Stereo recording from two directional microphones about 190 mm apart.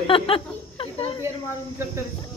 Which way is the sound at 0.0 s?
30° left (ahead or behind).